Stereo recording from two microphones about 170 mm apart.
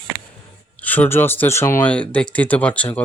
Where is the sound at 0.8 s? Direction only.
10° left (ahead or behind).